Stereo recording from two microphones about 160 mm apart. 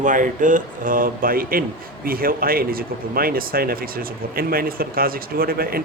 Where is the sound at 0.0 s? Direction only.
55° right (ahead or behind).